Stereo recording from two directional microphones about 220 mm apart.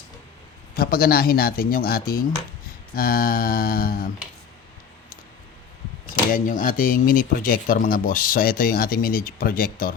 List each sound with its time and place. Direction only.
0.7 s speech: 40° left (ahead or behind)
6.3 s speech: 35° left (ahead or behind)